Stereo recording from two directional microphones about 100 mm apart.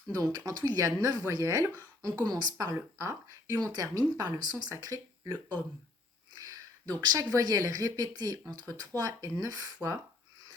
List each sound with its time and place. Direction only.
0.1 s speech: 35° right (ahead or behind)
6.3 s a sound: 40° right (ahead or behind)
7.3 s speech: 35° right (ahead or behind)